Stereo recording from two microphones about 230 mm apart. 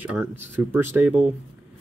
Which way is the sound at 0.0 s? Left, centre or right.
Centre.